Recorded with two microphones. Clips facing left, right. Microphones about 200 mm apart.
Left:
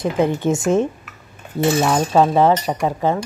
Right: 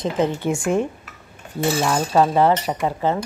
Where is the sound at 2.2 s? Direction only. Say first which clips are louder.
Left 2 dB; 15° left (ahead or behind).